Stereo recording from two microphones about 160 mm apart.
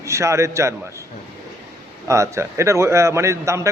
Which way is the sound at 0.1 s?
20° right (ahead or behind).